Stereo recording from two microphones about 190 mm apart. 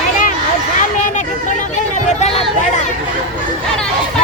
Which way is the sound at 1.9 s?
35° left (ahead or behind).